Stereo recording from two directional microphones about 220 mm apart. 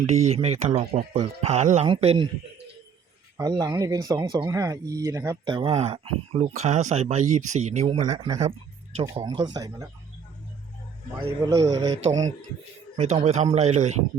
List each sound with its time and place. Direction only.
0.0 s speech: 30° right (ahead or behind)
3.3 s speech: 15° right (ahead or behind)
8.4 s music: 30° right (ahead or behind)
9.1 s speech: 20° right (ahead or behind)
11.4 s speech: 15° right (ahead or behind)
13.0 s speech: 30° right (ahead or behind)